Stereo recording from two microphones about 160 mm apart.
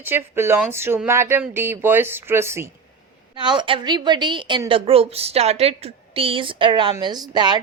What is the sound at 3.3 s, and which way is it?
A woman's voice, 30° right (ahead or behind).